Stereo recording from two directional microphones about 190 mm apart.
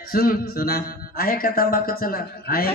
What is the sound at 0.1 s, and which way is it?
Speech, 50° left (ahead or behind).